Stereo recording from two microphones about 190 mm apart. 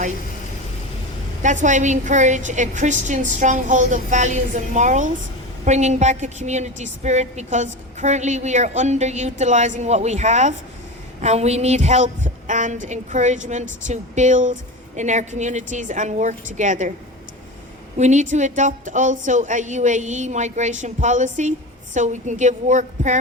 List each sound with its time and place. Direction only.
1.4 s a woman's voice: 40° right (ahead or behind)
17.9 s a woman's voice: 40° right (ahead or behind)